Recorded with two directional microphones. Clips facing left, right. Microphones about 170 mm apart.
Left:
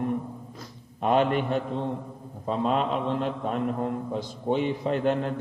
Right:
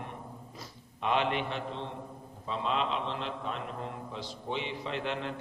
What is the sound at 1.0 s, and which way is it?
A man's voice, 45° left (ahead or behind).